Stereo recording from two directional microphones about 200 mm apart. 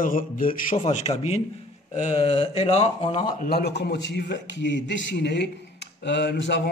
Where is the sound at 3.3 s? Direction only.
55° left (ahead or behind).